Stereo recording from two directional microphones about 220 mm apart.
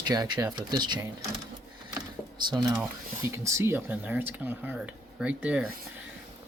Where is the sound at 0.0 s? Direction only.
20° right (ahead or behind).